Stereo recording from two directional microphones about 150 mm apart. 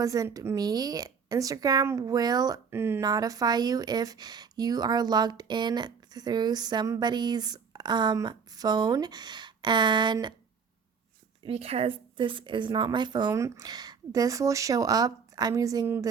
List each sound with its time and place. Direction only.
0.0 s a woman's voice: 20° right (ahead or behind)
11.4 s a woman's voice: 45° right (ahead or behind); by 16.0 s 25° right (ahead or behind)